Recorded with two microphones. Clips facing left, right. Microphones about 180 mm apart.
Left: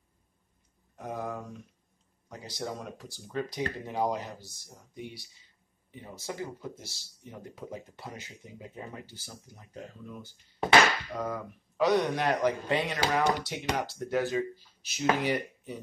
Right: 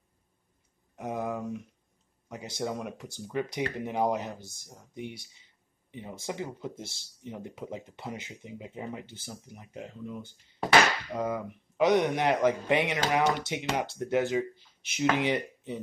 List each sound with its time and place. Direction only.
0.9 s speech: 20° right (ahead or behind)